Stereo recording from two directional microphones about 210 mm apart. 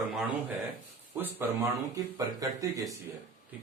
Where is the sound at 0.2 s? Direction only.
5° right (ahead or behind).